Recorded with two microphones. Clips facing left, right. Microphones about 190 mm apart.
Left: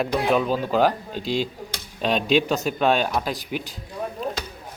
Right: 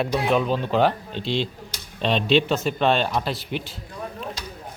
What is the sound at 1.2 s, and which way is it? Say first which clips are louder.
Speech: left 1 dB; 45° left (ahead or behind).